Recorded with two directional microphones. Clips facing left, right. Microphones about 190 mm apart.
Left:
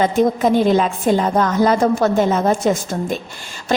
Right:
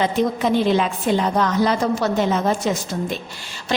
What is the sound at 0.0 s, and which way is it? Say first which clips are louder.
A woman's voice: left 4 dB; 45° left (ahead or behind).